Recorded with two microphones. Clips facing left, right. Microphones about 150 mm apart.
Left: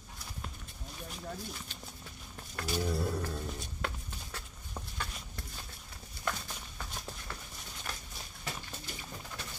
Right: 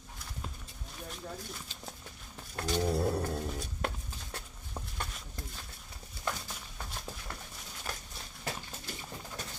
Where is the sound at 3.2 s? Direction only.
35° right (ahead or behind).